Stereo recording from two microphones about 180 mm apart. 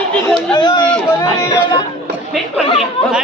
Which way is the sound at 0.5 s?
25° left (ahead or behind).